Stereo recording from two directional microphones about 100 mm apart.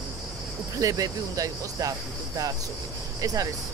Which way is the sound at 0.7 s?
35° right (ahead or behind).